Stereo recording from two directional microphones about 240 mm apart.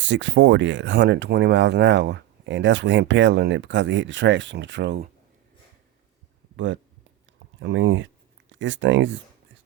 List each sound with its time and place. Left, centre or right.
0.0 s speech: right
7.6 s speech: right